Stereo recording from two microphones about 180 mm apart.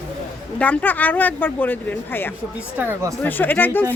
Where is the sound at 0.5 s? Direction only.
10° left (ahead or behind).